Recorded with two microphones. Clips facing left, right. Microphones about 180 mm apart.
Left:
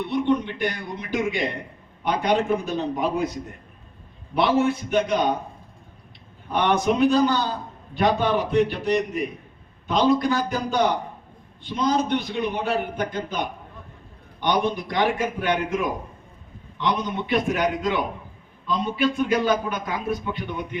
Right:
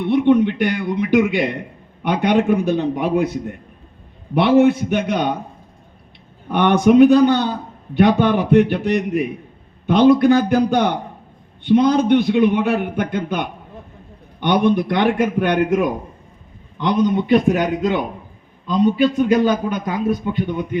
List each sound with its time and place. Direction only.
0.0 s a man's voice: 60° right (ahead or behind)
4.4 s a man's voice: 60° right (ahead or behind)
6.5 s a man's voice: 60° right (ahead or behind)